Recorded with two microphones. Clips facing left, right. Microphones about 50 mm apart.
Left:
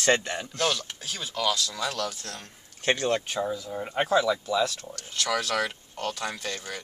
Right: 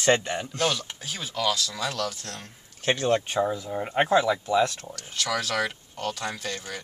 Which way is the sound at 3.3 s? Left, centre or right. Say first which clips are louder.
Right 4 dB; centre.